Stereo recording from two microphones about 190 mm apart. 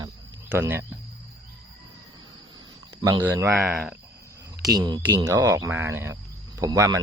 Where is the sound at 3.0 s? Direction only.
20° right (ahead or behind).